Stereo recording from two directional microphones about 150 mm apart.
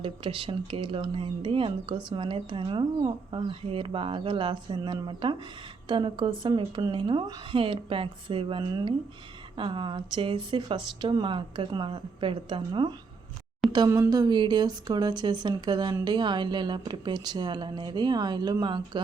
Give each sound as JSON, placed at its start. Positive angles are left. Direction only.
{"t": 0.0, "sound": "speech", "side_deg": -35}